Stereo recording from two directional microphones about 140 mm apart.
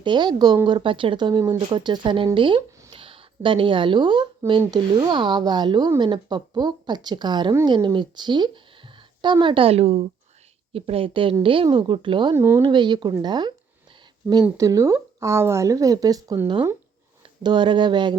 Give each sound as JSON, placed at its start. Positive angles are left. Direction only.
{"t": 0.0, "sound": "speech", "side_deg": -35}
{"t": 12.3, "sound": "speech", "side_deg": -20}
{"t": 12.6, "sound": "speech", "side_deg": -35}
{"t": 14.2, "sound": "speech", "side_deg": -10}
{"t": 14.6, "sound": "speech", "side_deg": -20}